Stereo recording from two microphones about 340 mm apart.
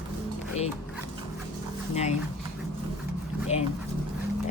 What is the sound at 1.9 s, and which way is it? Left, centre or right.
Speech, centre.